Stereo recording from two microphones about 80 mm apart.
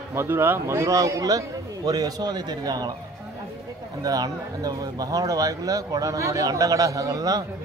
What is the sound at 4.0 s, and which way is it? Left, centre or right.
Speech, right.